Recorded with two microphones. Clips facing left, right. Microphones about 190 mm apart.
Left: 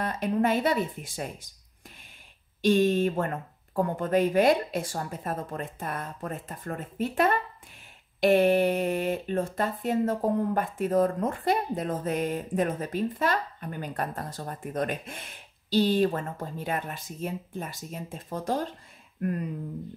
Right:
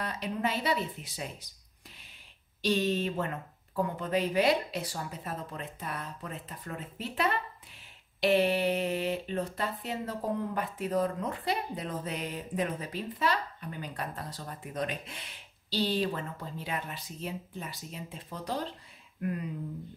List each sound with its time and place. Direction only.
0.0 s speech: 50° left (ahead or behind)
2.6 s speech: 50° left (ahead or behind)